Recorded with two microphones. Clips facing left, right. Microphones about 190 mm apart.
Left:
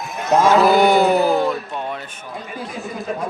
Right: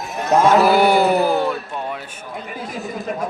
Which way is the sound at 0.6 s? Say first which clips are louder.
Left 1 dB; 10° right (ahead or behind).